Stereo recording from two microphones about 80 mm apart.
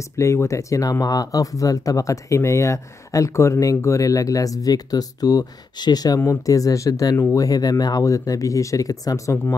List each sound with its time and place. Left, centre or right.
0.2 s speech: left